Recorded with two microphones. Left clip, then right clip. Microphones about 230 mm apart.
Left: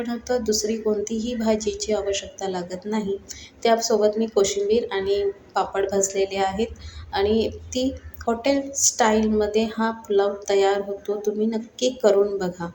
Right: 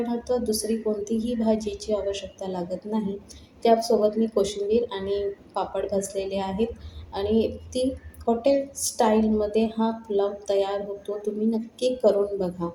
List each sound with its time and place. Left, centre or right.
0.0 s a woman's voice: left